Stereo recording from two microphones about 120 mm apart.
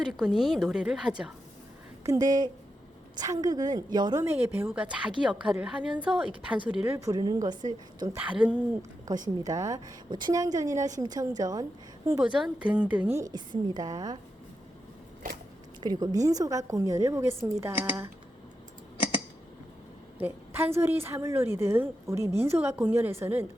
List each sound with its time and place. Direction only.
0.2 s a woman's voice: centre (ahead or behind)
2.0 s a woman's voice: 30° right (ahead or behind)
4.2 s a woman's voice: 20° right (ahead or behind)
6.8 s a woman's voice: 25° right (ahead or behind)
8.1 s a woman's voice: 10° right (ahead or behind)
9.0 s a woman's voice: 35° right (ahead or behind)
12.2 s a woman's voice: 10° right (ahead or behind)
13.1 s a woman's voice: 35° right (ahead or behind)
15.8 s a woman's voice: 35° right (ahead or behind); by 18.1 s 20° right (ahead or behind)
20.2 s a woman's voice: 20° right (ahead or behind)